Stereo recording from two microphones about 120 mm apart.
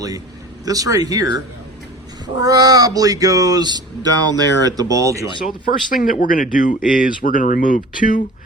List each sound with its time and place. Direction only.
0.6 s speech: 30° right (ahead or behind)
5.9 s speech: 90° left